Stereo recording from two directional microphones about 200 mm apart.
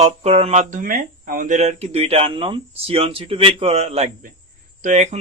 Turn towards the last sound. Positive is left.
turn(degrees=-35)  # may be behind; listen again after turning